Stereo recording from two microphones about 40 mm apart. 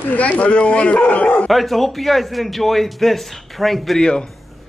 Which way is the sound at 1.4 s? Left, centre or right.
Centre.